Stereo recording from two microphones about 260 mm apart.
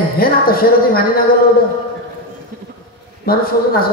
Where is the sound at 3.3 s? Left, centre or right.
Left.